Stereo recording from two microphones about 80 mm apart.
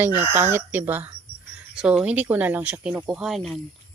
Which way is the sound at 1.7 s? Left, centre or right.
Centre.